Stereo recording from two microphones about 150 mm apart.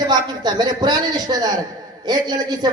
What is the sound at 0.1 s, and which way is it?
A man's voice, 30° right (ahead or behind).